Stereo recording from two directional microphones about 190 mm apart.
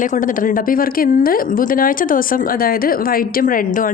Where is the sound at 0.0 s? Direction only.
45° left (ahead or behind).